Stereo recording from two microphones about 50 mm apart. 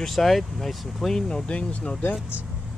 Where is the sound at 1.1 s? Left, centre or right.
Centre.